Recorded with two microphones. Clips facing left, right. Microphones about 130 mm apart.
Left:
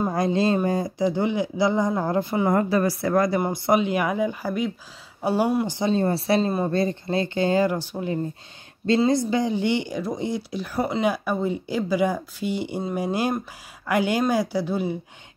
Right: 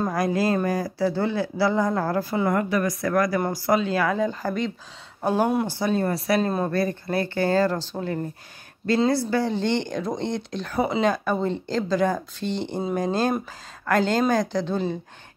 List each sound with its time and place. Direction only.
0.1 s speech: 25° left (ahead or behind); by 5.7 s 5° left (ahead or behind)
5.7 s speech: 20° left (ahead or behind)